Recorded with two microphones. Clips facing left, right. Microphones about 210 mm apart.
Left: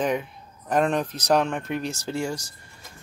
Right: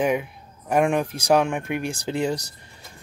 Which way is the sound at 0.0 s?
10° right (ahead or behind).